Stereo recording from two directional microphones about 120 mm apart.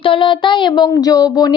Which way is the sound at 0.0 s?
45° left (ahead or behind).